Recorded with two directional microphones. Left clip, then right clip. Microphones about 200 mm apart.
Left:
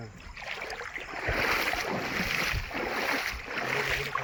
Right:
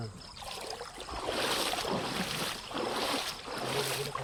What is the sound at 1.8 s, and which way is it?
Boat, 45° left (ahead or behind).